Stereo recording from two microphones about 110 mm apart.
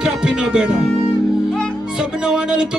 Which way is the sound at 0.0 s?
5° right (ahead or behind).